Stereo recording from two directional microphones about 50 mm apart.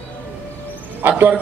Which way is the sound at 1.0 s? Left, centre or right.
Right.